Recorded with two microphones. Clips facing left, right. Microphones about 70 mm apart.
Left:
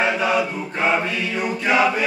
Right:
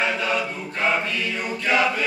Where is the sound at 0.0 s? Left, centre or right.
Centre.